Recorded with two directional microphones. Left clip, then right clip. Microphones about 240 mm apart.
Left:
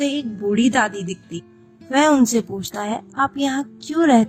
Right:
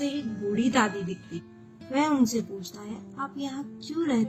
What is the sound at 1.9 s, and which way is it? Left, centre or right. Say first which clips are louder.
A woman's voice: left 10 dB; left.